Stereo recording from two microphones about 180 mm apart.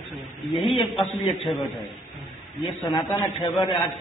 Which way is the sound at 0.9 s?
Centre (ahead or behind).